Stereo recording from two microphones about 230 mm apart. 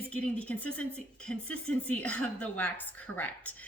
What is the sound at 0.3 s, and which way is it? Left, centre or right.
Speech, centre.